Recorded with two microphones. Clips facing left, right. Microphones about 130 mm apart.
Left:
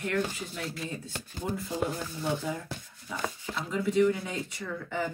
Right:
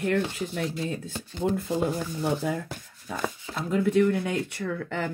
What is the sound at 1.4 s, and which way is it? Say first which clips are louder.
Speech: right 6 dB; 60° right (ahead or behind).